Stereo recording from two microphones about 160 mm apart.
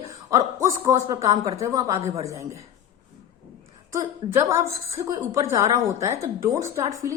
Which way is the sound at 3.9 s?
20° right (ahead or behind).